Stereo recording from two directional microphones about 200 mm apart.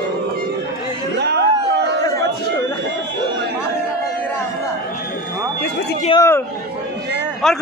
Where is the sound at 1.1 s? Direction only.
55° right (ahead or behind).